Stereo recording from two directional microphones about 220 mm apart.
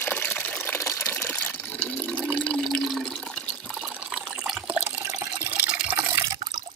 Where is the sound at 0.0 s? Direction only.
10° left (ahead or behind).